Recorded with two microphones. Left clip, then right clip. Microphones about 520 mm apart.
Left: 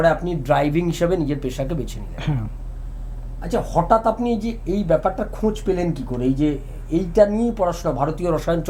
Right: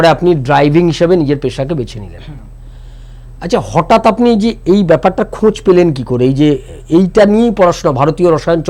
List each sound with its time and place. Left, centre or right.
0.3 s speech: right
3.4 s speech: right